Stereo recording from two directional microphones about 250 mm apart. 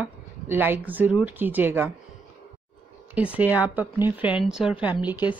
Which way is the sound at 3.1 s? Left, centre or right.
Centre.